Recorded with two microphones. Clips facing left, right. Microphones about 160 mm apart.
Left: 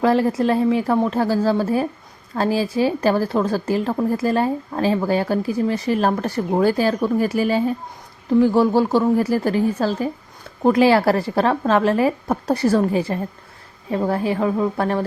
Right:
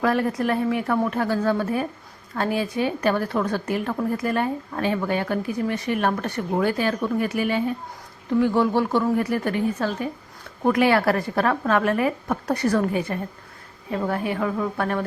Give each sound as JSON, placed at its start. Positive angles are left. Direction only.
{"t": 0.0, "sound": "a woman's voice", "side_deg": 25}